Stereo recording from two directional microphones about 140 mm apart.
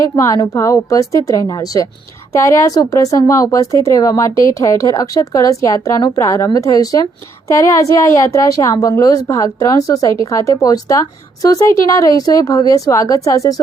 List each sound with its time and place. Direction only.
0.0 s a woman's voice: 25° left (ahead or behind)